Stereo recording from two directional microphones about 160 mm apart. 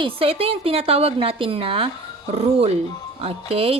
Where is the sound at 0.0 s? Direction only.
35° right (ahead or behind).